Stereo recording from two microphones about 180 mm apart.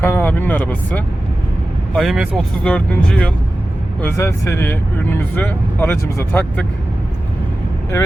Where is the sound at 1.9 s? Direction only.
Centre (ahead or behind).